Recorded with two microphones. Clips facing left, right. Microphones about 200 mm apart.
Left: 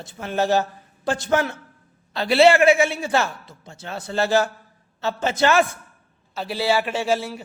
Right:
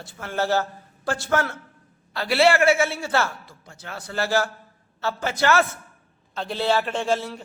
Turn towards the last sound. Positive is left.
turn(degrees=5)  # may be behind; listen again after turning